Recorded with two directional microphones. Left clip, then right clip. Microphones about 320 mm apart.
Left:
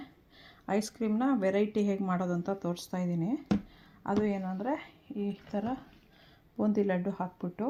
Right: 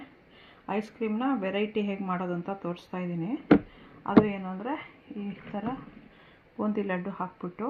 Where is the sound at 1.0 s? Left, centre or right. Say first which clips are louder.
Even; left.